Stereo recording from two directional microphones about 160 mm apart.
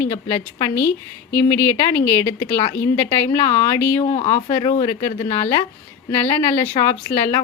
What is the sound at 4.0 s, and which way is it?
Speech, 35° left (ahead or behind).